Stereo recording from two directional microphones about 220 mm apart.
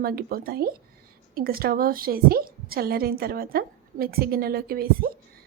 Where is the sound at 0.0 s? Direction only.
45° right (ahead or behind).